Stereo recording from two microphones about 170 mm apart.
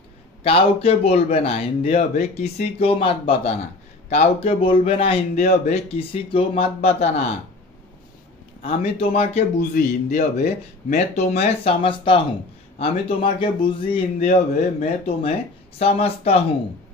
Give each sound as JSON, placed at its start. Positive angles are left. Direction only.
{"t": 0.4, "sound": "speech", "side_deg": 35}
{"t": 8.6, "sound": "speech", "side_deg": 35}
{"t": 14.2, "sound": "speech", "side_deg": 45}